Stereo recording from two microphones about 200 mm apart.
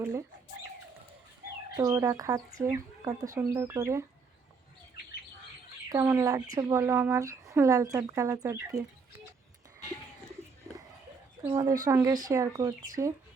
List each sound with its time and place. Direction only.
0.0 s speech: 15° right (ahead or behind)
1.7 s speech: 15° right (ahead or behind)
5.9 s speech: 15° right (ahead or behind)
11.4 s speech: 15° right (ahead or behind)